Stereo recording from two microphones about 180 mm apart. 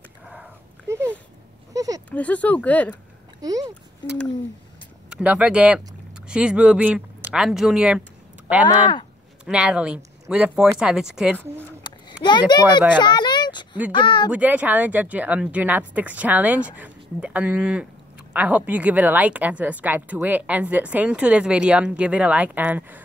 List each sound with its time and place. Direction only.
0.3 s sniff: 10° right (ahead or behind)
1.7 s a sound: 20° right (ahead or behind)
2.0 s speech: 10° left (ahead or behind)
3.3 s speech: 20° right (ahead or behind)
5.1 s a woman's voice: 5° right (ahead or behind)
8.6 s speech: 25° left (ahead or behind)
9.4 s speech: 5° right (ahead or behind)
11.8 s a sound: 25° left (ahead or behind)
13.9 s speech: 25° left (ahead or behind)
14.3 s a woman's voice: 10° right (ahead or behind)